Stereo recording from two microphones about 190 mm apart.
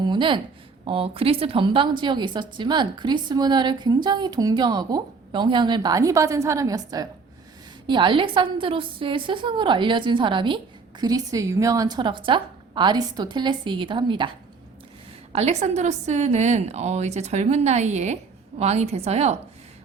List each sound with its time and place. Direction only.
0.0 s a sound: 25° right (ahead or behind)
0.9 s a woman's voice: 30° right (ahead or behind)
15.3 s a woman's voice: 35° right (ahead or behind)